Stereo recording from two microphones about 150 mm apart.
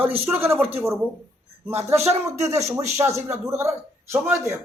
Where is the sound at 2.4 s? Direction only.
20° right (ahead or behind).